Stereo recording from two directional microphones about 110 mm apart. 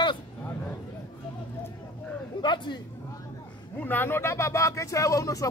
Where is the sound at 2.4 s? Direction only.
45° left (ahead or behind).